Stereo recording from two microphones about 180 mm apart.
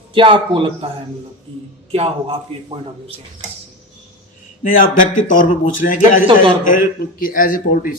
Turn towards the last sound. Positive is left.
turn(degrees=50)  # may be behind; listen again after turning